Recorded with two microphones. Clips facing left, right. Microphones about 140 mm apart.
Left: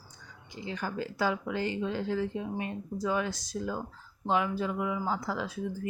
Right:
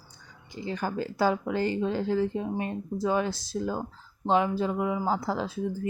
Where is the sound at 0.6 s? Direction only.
40° right (ahead or behind).